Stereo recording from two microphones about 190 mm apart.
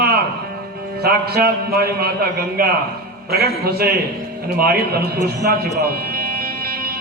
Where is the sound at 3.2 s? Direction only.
55° right (ahead or behind).